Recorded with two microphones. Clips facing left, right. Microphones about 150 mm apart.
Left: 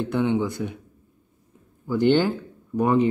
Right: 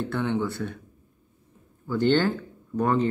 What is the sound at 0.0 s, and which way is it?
Speech, 15° left (ahead or behind).